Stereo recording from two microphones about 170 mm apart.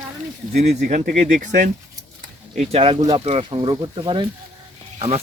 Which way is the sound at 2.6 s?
35° right (ahead or behind).